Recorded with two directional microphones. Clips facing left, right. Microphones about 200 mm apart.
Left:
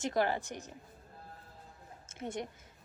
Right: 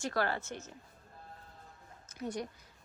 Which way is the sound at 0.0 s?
20° left (ahead or behind).